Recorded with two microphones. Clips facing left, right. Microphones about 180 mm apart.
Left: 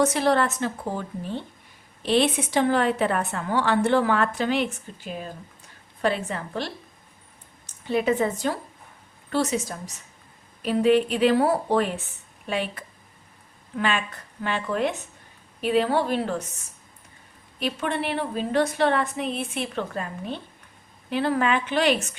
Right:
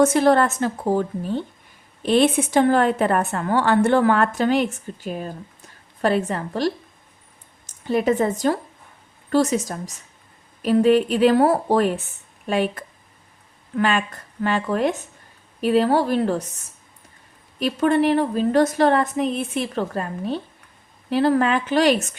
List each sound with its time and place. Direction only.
0.0 s a woman's voice: 50° right (ahead or behind)
7.9 s a woman's voice: 45° right (ahead or behind)
17.6 s a woman's voice: 40° right (ahead or behind)